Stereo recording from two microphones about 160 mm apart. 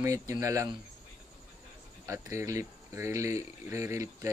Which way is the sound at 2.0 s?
20° right (ahead or behind).